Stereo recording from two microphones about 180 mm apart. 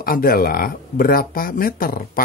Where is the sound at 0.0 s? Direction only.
55° left (ahead or behind).